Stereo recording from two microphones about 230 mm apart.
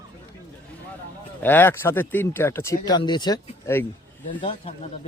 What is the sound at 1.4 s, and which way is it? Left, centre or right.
Speech, centre.